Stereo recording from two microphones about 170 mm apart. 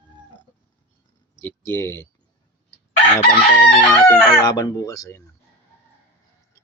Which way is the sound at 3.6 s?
15° left (ahead or behind).